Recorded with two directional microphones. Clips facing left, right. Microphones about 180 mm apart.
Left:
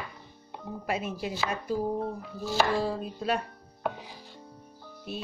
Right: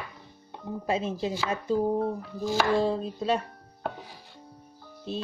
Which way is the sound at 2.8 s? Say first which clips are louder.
Right 4 dB; 25° right (ahead or behind).